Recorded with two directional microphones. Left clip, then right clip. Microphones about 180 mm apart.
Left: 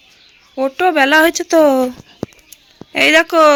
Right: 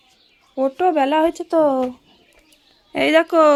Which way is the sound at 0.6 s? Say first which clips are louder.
Left 4 dB; centre (ahead or behind).